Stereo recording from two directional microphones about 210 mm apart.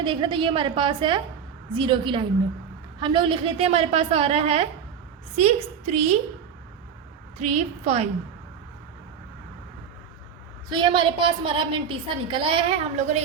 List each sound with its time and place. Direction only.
0.0 s a woman's voice: 25° right (ahead or behind)
7.3 s a woman's voice: 30° right (ahead or behind)
10.7 s a woman's voice: 20° right (ahead or behind)